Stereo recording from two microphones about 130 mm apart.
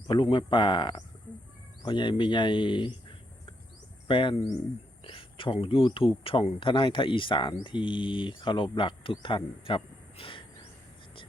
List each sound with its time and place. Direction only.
0.1 s speech: 40° left (ahead or behind)